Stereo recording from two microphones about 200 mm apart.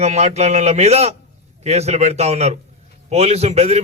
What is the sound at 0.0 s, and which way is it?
A man's voice, 35° right (ahead or behind).